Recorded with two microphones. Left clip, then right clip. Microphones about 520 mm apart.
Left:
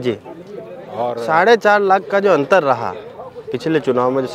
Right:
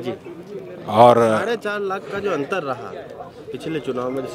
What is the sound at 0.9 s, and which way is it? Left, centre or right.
Speech, right.